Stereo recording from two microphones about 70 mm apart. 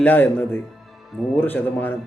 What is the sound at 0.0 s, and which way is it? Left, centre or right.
Speech, left.